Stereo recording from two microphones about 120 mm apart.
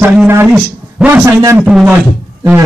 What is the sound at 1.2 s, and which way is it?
Speech, 25° right (ahead or behind).